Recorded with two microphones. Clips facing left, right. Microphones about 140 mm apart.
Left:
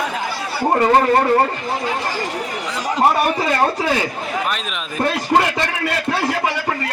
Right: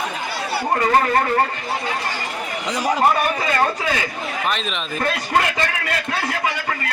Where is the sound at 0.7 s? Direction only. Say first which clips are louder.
Left 4 dB; 25° left (ahead or behind).